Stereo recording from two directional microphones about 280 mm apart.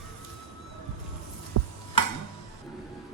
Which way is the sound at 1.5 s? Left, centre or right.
Right.